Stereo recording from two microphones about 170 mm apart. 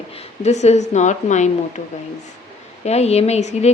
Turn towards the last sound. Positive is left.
turn(degrees=40)  # may be behind; listen again after turning